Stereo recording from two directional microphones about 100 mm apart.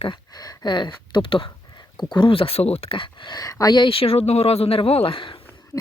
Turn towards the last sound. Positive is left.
turn(degrees=60)  # may be behind; listen again after turning